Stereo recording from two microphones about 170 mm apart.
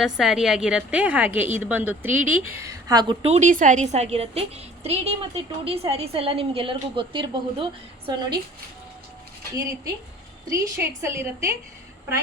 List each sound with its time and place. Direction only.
0.0 s a woman's voice: centre (ahead or behind); by 3.2 s 25° right (ahead or behind)
3.2 s a woman's voice: 45° right (ahead or behind)
10.5 s a woman's voice: 15° right (ahead or behind)